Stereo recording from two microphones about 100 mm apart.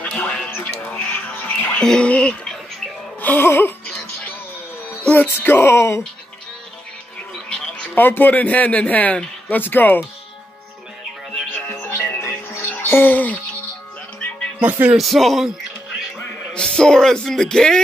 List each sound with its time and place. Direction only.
0.0 s music: 5° left (ahead or behind)
1.8 s speech: 10° left (ahead or behind)
3.2 s music: 20° left (ahead or behind)
5.1 s music: 20° left (ahead or behind)
7.4 s speech: 10° left (ahead or behind)
11.5 s music: 15° left (ahead or behind)
14.6 s speech: 15° right (ahead or behind)
15.0 s music: centre (ahead or behind)
16.5 s music: 10° left (ahead or behind)